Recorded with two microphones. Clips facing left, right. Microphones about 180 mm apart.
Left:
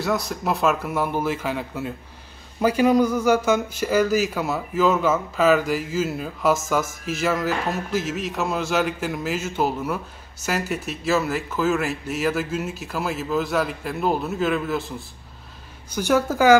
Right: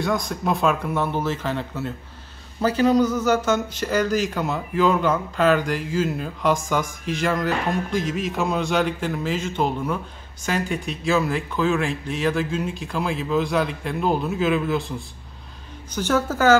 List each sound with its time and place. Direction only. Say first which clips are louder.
0.0 s speech: even; 5° left (ahead or behind)